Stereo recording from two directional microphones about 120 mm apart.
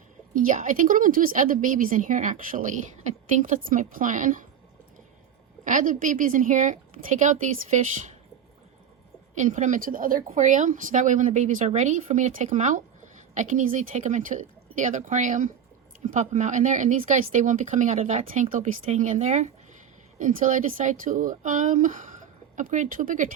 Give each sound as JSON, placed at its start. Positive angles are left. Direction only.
{"t": 0.3, "sound": "a woman's voice", "side_deg": -90}
{"t": 5.6, "sound": "a woman's voice", "side_deg": -90}
{"t": 9.3, "sound": "a woman's voice", "side_deg": -90}
{"t": 18.0, "sound": "speech", "side_deg": -75}
{"t": 20.1, "sound": "a woman's voice", "side_deg": -90}